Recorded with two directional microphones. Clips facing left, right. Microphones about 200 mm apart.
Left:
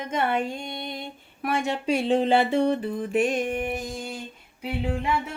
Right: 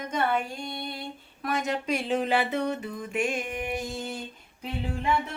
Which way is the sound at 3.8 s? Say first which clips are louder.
Even; 15° left (ahead or behind).